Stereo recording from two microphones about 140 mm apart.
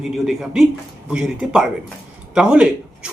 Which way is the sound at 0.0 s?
Centre (ahead or behind).